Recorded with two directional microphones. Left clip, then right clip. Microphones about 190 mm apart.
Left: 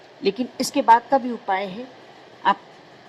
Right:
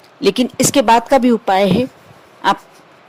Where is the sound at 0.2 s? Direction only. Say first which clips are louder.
Right 9 dB; 15° right (ahead or behind).